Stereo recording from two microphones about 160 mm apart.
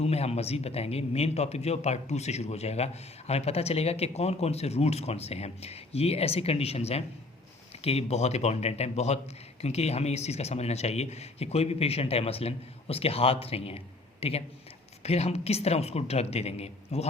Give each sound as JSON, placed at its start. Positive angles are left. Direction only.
{"t": 0.0, "sound": "a man's voice", "side_deg": 40}